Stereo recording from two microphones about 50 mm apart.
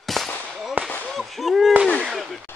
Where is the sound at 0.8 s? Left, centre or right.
Right.